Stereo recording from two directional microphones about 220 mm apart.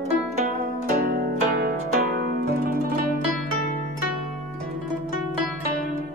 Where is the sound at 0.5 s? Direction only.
40° right (ahead or behind).